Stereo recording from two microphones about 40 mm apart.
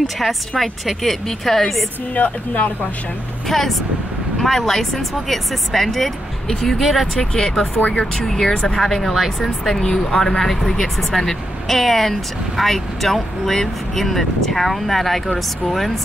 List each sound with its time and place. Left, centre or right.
0.0 s speech: centre
2.1 s speech: left
3.4 s speech: centre
6.8 s speech: centre
7.2 s speech: centre
7.7 s speech: left
8.3 s speech: centre